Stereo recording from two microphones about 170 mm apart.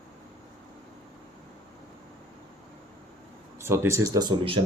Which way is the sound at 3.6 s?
15° right (ahead or behind).